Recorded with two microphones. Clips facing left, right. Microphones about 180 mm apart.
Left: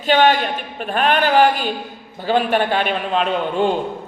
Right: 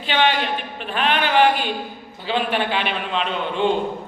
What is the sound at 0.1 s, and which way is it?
A man's voice, 45° left (ahead or behind).